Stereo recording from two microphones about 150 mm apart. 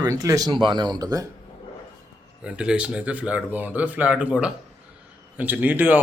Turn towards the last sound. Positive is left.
turn(degrees=-10)  # may be behind; listen again after turning